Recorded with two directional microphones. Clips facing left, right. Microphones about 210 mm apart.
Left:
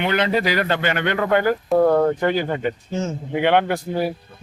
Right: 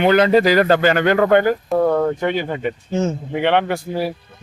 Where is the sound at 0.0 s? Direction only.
40° right (ahead or behind).